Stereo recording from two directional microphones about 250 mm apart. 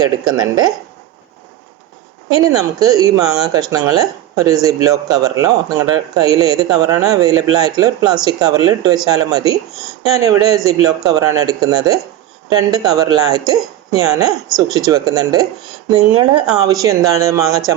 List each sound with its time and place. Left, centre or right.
0.0 s speech: centre
2.3 s speech: centre